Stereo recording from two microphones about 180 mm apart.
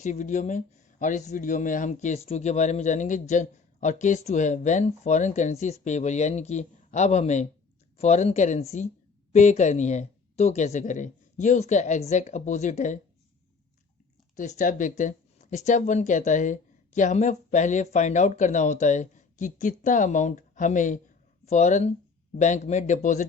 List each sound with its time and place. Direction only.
0.0 s speech: 40° left (ahead or behind)
14.3 s speech: 45° left (ahead or behind)